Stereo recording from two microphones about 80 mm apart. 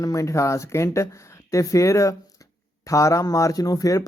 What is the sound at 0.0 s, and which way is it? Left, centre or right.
A man's voice, left.